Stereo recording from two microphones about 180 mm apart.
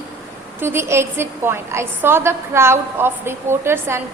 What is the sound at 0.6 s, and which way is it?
A woman's voice, 15° right (ahead or behind).